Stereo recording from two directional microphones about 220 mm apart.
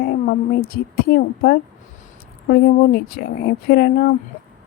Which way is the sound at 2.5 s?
45° left (ahead or behind).